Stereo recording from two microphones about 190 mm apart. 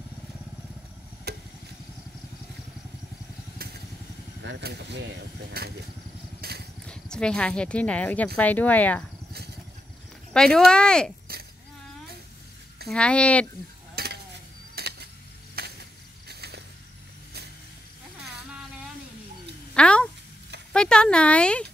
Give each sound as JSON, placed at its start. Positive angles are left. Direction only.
{"t": 1.3, "sound": "vehicle", "side_deg": -55}
{"t": 4.4, "sound": "speech", "side_deg": -65}
{"t": 6.4, "sound": "vehicle", "side_deg": -60}
{"t": 6.9, "sound": "speech", "side_deg": 5}
{"t": 10.3, "sound": "speech", "side_deg": 5}
{"t": 12.8, "sound": "speech", "side_deg": 5}
{"t": 14.0, "sound": "a sound", "side_deg": -55}
{"t": 15.5, "sound": "mechanisms", "side_deg": -60}
{"t": 19.7, "sound": "a sound", "side_deg": 5}